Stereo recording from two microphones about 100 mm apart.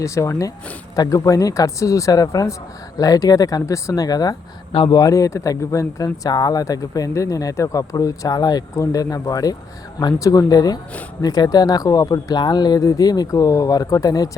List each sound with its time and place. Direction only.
0.0 s speech: 30° left (ahead or behind)